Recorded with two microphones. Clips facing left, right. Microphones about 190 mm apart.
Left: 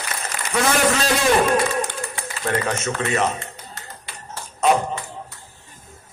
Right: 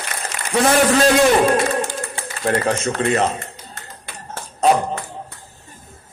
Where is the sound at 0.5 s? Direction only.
35° right (ahead or behind).